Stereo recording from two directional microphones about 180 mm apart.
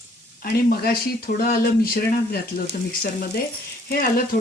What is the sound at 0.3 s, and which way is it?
Speech, 60° left (ahead or behind).